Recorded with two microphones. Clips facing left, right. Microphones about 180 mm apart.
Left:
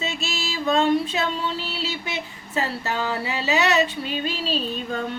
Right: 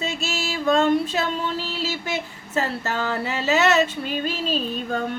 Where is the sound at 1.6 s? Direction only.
40° right (ahead or behind).